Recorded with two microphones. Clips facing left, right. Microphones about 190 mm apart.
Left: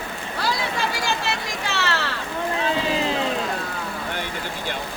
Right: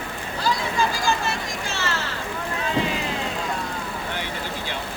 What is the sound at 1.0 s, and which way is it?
Vehicle, 65° left (ahead or behind).